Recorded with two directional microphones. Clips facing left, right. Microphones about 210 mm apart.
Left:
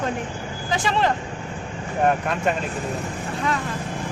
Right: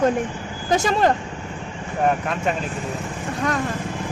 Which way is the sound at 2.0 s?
Centre (ahead or behind).